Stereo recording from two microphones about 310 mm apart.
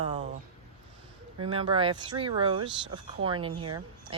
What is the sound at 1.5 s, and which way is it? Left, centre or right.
A woman's voice, centre.